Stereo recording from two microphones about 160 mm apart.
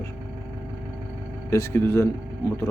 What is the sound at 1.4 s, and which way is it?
Speech, 15° left (ahead or behind).